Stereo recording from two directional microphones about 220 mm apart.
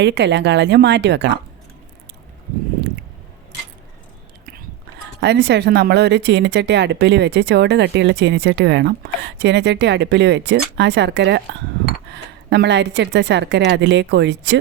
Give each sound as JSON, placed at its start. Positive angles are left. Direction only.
{"t": 0.0, "sound": "speech", "side_deg": -50}
{"t": 5.2, "sound": "speech", "side_deg": -50}